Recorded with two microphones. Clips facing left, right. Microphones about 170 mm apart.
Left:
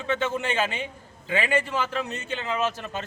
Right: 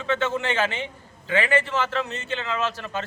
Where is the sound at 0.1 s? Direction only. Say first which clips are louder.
Right 2 dB; 15° left (ahead or behind).